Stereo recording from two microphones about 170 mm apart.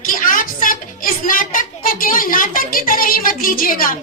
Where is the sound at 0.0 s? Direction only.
55° left (ahead or behind).